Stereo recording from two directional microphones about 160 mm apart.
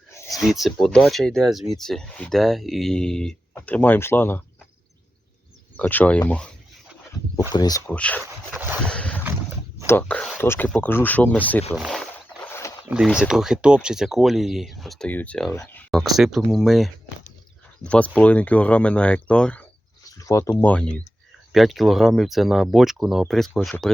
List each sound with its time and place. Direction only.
0.3 s speech: centre (ahead or behind)
5.7 s speech: 10° left (ahead or behind)
7.5 s speech: 25° left (ahead or behind)
7.9 s speech: 10° left (ahead or behind)
8.8 s wild animals: 5° left (ahead or behind)
9.8 s speech: 15° left (ahead or behind)
11.7 s speech: centre (ahead or behind)
12.5 s a sound: 15° left (ahead or behind)
12.9 s speech: 5° right (ahead or behind)
20.1 s speech: 20° left (ahead or behind); by 23.2 s centre (ahead or behind)